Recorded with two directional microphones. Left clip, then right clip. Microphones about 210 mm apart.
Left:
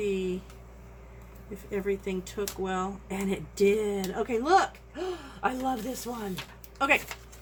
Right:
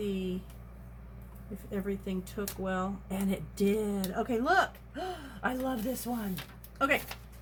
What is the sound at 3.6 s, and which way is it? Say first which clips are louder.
Speech: left 6 dB; 35° left (ahead or behind).